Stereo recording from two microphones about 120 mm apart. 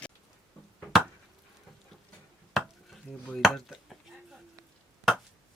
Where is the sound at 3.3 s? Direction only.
Centre (ahead or behind).